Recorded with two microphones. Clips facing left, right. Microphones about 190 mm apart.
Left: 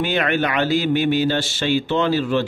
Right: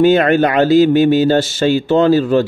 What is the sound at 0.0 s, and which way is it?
A man's voice, 40° right (ahead or behind).